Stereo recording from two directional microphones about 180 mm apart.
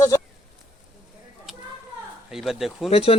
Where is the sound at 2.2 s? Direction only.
Centre (ahead or behind).